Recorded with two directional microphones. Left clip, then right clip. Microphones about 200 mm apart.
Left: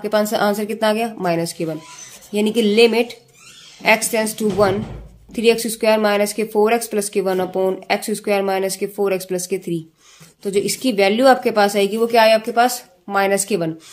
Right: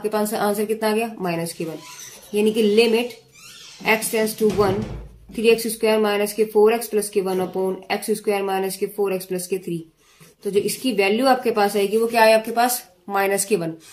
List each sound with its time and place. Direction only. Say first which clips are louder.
0.0 s speech: left 4 dB; 45° left (ahead or behind)